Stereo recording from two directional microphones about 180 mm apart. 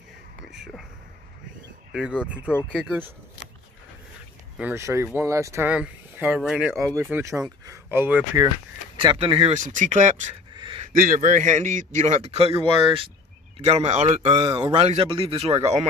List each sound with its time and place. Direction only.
0.5 s a sound: centre (ahead or behind)
1.9 s speech: 5° right (ahead or behind)
4.6 s speech: 10° right (ahead or behind)
7.0 s speech: 15° right (ahead or behind)
8.9 s speech: 30° right (ahead or behind)
9.6 s a man's voice: 45° right (ahead or behind)
10.5 s a sound: 25° right (ahead or behind)
10.9 s a man's voice: 50° right (ahead or behind)
14.3 s a man's voice: 25° right (ahead or behind)